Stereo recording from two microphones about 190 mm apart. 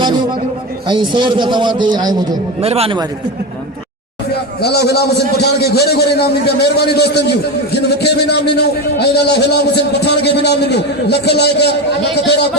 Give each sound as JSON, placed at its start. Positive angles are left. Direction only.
{"t": 0.0, "sound": "a sound", "side_deg": -20}
{"t": 0.9, "sound": "a man's voice", "side_deg": -25}
{"t": 2.6, "sound": "a man's voice", "side_deg": -30}
{"t": 4.6, "sound": "a man's voice", "side_deg": 60}